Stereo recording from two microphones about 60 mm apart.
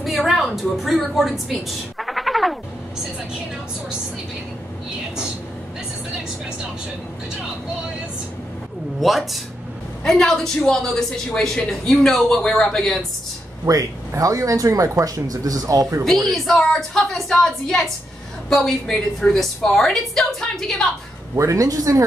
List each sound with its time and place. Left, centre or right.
0.0 s a woman's voice: centre
9.0 s a woman's voice: centre
13.7 s speech: right
16.3 s a woman's voice: centre
21.4 s speech: right